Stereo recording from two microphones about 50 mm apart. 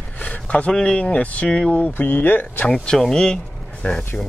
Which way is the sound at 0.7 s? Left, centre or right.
Centre.